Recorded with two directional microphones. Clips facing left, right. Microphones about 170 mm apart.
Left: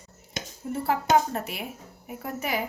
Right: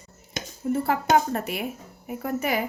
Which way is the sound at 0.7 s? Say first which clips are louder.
Right 2 dB; 60° right (ahead or behind).